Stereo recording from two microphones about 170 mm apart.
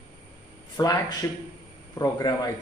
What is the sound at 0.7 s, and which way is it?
A man's voice, 20° left (ahead or behind).